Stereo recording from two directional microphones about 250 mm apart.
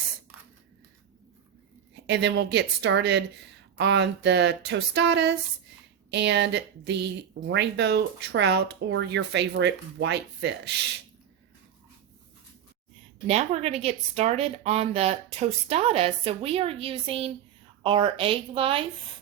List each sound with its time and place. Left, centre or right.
2.0 s speech: right
13.2 s a woman's voice: right